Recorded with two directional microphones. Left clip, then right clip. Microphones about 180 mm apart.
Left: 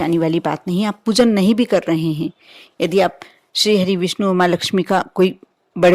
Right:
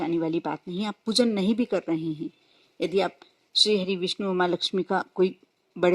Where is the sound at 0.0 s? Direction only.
45° left (ahead or behind).